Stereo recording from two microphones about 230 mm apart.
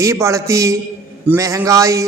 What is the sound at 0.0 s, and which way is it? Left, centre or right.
A woman's voice, centre.